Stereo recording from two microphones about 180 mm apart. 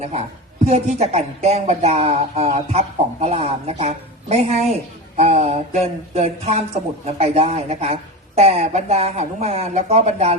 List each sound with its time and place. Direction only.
0.0 s a woman's voice: 35° right (ahead or behind)